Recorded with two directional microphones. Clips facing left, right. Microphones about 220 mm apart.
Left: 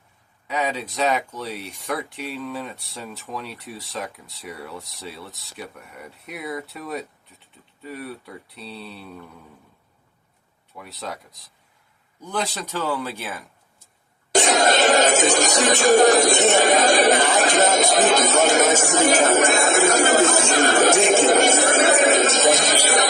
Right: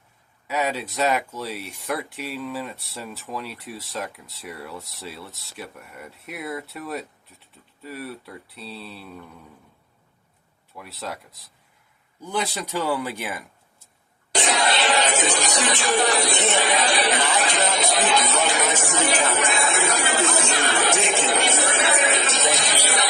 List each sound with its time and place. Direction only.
0.4 s speech: 5° right (ahead or behind)
10.8 s speech: centre (ahead or behind)
12.2 s a man's voice: 10° right (ahead or behind)
14.3 s speech: 45° left (ahead or behind)